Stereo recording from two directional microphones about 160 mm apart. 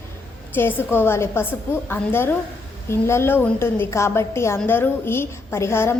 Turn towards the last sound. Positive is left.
turn(degrees=15)  # may be behind; listen again after turning